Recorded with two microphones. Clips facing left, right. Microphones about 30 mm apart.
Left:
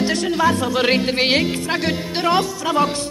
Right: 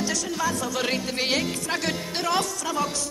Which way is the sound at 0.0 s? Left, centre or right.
Left.